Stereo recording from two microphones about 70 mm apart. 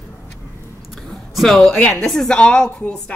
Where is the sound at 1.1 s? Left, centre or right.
Centre.